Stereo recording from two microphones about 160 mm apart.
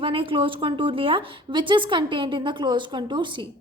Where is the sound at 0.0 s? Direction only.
35° right (ahead or behind).